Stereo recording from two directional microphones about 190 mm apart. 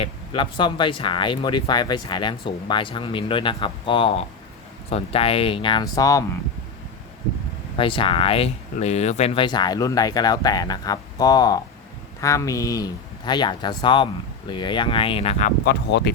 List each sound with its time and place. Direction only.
0.0 s speech: 25° left (ahead or behind)
7.8 s speech: 25° left (ahead or behind)
15.6 s speech: 65° left (ahead or behind)